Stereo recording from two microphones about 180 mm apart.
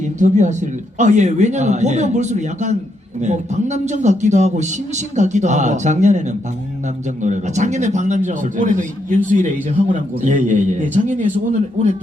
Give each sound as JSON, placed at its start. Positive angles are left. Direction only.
{"t": 0.2, "sound": "a man's voice", "side_deg": -45}